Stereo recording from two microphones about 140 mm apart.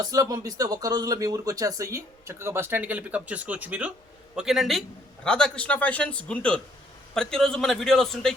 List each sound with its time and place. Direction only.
0.0 s a man's voice: 25° right (ahead or behind); by 8.3 s 5° left (ahead or behind)